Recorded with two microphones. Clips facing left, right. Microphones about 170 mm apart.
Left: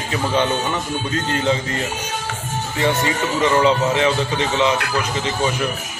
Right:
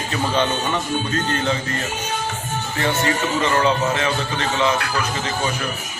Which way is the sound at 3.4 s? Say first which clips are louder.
Left 5 dB; 15° left (ahead or behind).